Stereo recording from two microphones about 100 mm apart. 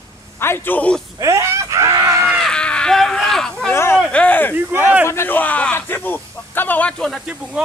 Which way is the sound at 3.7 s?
25° left (ahead or behind).